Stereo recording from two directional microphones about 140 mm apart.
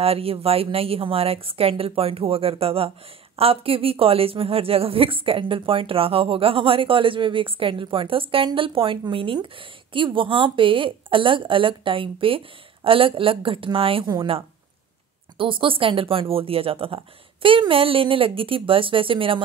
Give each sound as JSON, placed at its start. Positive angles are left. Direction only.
{"t": 0.0, "sound": "a woman's voice", "side_deg": -45}